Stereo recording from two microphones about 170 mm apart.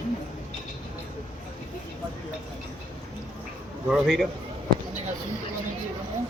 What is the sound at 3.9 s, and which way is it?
Speech, centre (ahead or behind).